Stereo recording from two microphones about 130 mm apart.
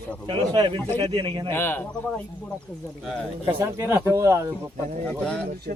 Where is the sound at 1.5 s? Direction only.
15° left (ahead or behind).